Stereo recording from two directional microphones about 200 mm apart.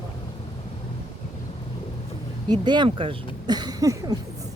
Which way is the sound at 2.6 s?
25° right (ahead or behind).